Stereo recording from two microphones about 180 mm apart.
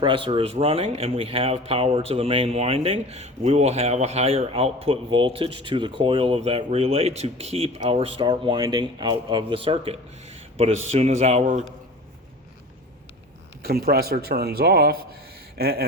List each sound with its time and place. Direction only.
0.0 s speech: 25° right (ahead or behind); by 11.7 s 40° right (ahead or behind)
13.6 s speech: 60° right (ahead or behind)